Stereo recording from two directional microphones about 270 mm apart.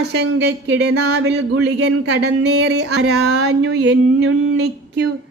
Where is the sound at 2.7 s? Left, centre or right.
Right.